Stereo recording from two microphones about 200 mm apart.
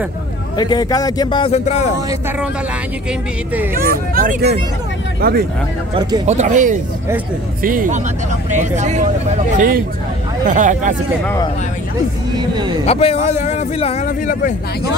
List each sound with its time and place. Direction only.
0.6 s a man's voice: 20° left (ahead or behind)
2.0 s speech: 10° right (ahead or behind)
3.7 s speech: 45° right (ahead or behind)
6.2 s speech: 35° right (ahead or behind)
9.6 s speech: 45° right (ahead or behind)
12.4 s speech: 20° right (ahead or behind)
12.8 s a man's voice: 30° left (ahead or behind)
14.0 s speech: 45° left (ahead or behind)